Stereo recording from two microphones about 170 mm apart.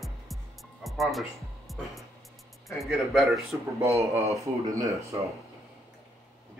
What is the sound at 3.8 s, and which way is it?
Speech, 15° right (ahead or behind).